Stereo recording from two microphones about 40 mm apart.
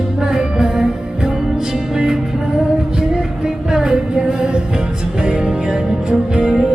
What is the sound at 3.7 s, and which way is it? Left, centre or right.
Music, centre.